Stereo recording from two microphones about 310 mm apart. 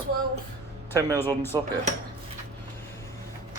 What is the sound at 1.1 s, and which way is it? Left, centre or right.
Speech, centre.